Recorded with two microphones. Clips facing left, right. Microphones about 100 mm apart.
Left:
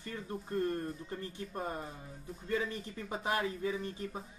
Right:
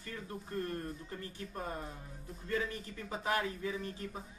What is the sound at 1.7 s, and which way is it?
Speech, centre (ahead or behind).